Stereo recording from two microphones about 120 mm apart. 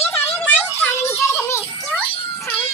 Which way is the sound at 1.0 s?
20° left (ahead or behind).